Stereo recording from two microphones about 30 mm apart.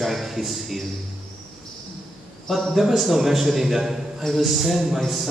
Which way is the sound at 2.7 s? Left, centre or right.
Centre.